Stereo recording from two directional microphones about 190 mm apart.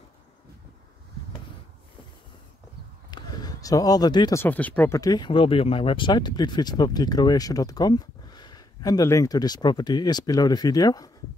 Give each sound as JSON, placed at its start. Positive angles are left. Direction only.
{"t": 3.1, "sound": "speech", "side_deg": 20}